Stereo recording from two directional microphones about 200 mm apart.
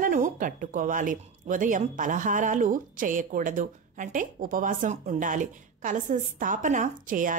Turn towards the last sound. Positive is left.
turn(degrees=-40)  # may be behind; listen again after turning